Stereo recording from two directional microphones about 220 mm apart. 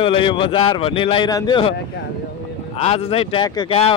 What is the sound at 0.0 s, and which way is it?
Speech, 25° left (ahead or behind).